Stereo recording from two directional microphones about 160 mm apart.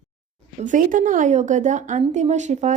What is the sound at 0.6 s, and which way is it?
A woman's voice, 55° right (ahead or behind).